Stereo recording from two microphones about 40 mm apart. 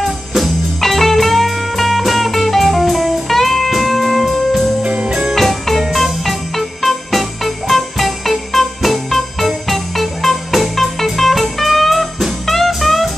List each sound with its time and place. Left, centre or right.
0.7 s music: centre
4.8 s music: right
5.3 s music: centre